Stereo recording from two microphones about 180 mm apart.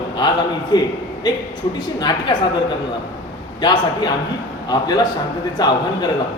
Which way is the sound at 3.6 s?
25° left (ahead or behind).